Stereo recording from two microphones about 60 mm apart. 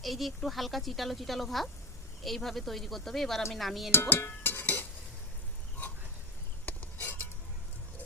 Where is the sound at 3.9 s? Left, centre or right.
Left.